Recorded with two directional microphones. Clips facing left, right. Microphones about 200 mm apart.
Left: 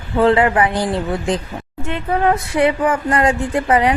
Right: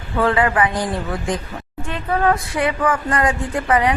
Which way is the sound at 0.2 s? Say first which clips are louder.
Left 4 dB; 25° left (ahead or behind).